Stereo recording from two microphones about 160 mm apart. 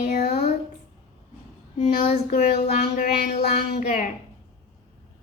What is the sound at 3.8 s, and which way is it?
Speech, 55° left (ahead or behind).